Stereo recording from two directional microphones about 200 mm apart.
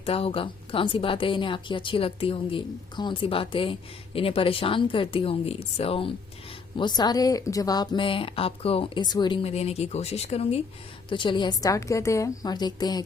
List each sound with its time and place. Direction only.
0.0 s a woman's voice: 30° left (ahead or behind)